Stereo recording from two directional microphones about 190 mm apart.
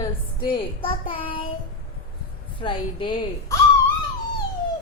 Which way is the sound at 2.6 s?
25° left (ahead or behind).